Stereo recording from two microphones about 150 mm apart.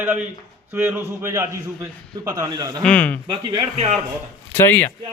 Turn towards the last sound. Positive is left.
turn(degrees=15)  # may be behind; listen again after turning